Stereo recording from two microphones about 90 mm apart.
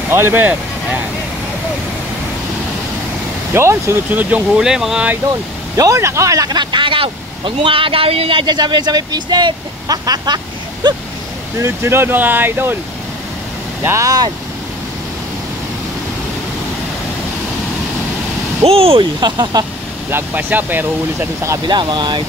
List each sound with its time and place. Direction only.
0.1 s speech: 25° right (ahead or behind)
3.5 s speech: 30° right (ahead or behind)
4.6 s speech: 5° right (ahead or behind)
5.3 s speech: 40° right (ahead or behind); by 8.5 s 85° right
8.5 s speech: 55° right (ahead or behind)
11.5 s speech: 30° right (ahead or behind)
13.8 s speech: 35° right (ahead or behind)
18.7 s speech: 90° right
19.1 s speech: 55° right (ahead or behind)
20.1 s speech: 20° right (ahead or behind)
21.6 s speech: 55° right (ahead or behind)